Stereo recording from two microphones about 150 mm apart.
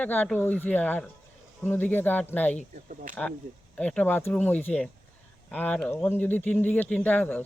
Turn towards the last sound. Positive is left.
turn(degrees=10)  # may be behind; listen again after turning